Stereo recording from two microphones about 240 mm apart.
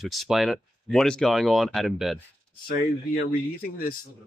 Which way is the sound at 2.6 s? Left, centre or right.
Left.